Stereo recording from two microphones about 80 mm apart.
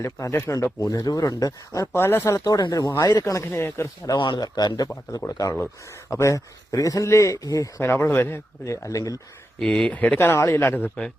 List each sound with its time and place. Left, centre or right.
0.0 s speech: left
0.8 s speech: left
1.9 s speech: left
2.4 s speech: left
3.4 s speech: left
4.0 s a man's voice: left
6.1 s speech: left
7.8 s speech: left
8.6 s speech: left
9.6 s speech: centre
10.2 s speech: left